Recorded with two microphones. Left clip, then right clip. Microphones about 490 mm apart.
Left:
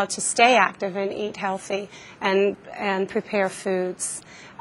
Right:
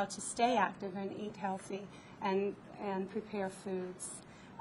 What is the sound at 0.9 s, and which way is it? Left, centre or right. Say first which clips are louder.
Speech: left 16 dB; centre.